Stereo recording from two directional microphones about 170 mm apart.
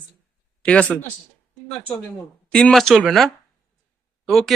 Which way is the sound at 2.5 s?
5° left (ahead or behind).